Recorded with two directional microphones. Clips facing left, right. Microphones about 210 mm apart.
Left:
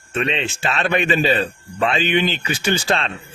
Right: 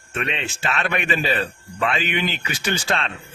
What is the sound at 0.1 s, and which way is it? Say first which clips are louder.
Speech: left 5 dB; 25° left (ahead or behind).